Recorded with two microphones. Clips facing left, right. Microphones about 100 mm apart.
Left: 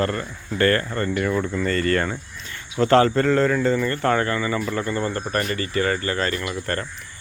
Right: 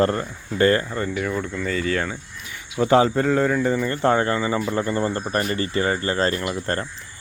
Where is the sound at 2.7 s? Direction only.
15° right (ahead or behind).